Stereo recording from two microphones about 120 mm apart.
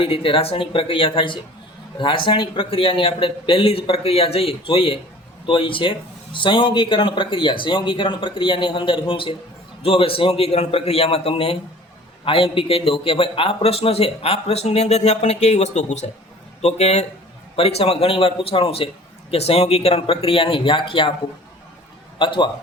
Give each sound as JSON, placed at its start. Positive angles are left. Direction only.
{"t": 0.0, "sound": "a man's voice", "side_deg": 45}
{"t": 16.6, "sound": "a man's voice", "side_deg": 65}
{"t": 22.2, "sound": "a man's voice", "side_deg": 45}